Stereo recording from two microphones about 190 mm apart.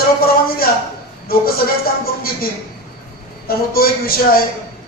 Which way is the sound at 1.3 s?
50° left (ahead or behind).